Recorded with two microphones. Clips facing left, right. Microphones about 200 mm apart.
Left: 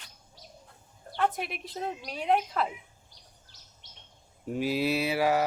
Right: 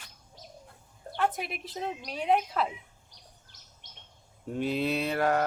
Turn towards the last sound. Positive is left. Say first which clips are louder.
# left 1 dB
turn(degrees=5)  # may be behind; listen again after turning